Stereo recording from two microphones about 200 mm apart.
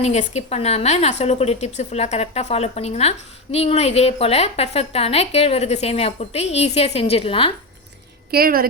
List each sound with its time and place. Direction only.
0.0 s speech: 35° left (ahead or behind)
8.3 s a woman's voice: 45° right (ahead or behind)